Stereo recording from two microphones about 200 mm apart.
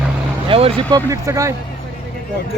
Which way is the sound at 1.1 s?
15° right (ahead or behind).